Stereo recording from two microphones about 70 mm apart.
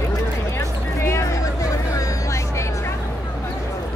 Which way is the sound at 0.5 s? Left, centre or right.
Left.